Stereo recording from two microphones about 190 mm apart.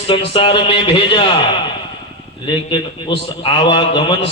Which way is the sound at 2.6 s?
25° left (ahead or behind).